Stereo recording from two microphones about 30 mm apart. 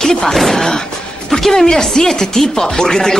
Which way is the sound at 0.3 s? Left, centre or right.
Centre.